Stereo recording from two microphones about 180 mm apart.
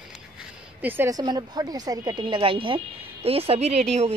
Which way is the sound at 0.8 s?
10° right (ahead or behind).